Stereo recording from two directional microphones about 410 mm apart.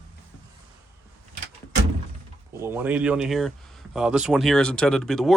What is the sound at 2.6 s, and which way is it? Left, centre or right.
Speech, centre.